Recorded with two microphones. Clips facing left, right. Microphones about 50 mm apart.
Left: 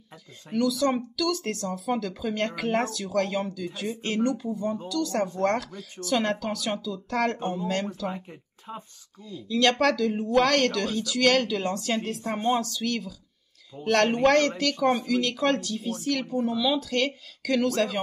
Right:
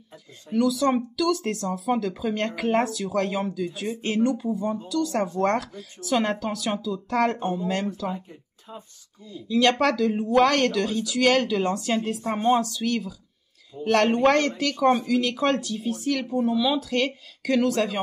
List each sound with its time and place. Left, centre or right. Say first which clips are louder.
0.5 s speech: right 2 dB; centre
8.1 s speech: right 2 dB; left
9.3 s speech: right 2 dB; centre